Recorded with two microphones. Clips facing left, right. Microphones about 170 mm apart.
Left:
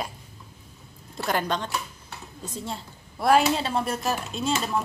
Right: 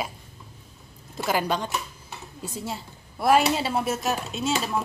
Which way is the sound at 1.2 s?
5° right (ahead or behind).